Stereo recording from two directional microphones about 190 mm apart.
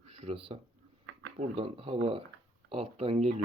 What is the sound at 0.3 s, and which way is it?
Speech, 30° right (ahead or behind).